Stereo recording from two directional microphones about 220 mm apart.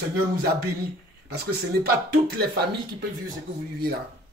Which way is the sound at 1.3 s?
45° right (ahead or behind).